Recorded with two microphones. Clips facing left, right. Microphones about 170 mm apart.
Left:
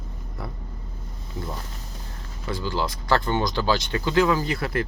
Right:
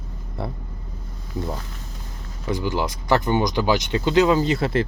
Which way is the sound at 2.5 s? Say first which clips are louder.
Right 3 dB; 20° right (ahead or behind).